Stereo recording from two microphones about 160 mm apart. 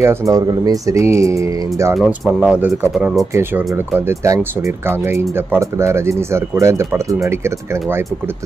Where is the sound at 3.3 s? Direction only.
15° right (ahead or behind).